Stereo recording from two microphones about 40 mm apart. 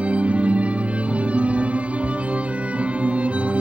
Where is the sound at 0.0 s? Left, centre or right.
Right.